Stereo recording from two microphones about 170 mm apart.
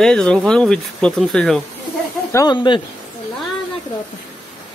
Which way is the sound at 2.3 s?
25° left (ahead or behind).